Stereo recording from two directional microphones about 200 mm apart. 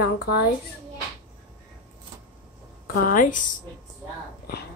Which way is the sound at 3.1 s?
40° left (ahead or behind).